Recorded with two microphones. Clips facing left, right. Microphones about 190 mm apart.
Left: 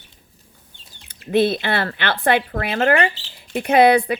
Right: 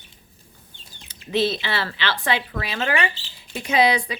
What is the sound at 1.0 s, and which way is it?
Speech, 55° left (ahead or behind).